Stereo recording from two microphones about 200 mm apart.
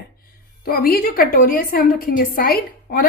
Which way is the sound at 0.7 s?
45° left (ahead or behind).